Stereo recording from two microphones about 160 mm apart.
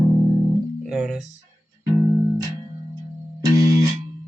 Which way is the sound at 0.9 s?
5° right (ahead or behind).